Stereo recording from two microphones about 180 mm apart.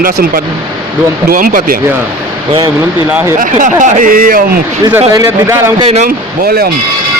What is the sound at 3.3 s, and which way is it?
Speech, 45° right (ahead or behind).